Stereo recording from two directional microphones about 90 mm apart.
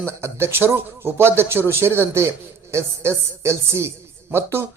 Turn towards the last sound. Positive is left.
turn(degrees=-25)  # may be behind; listen again after turning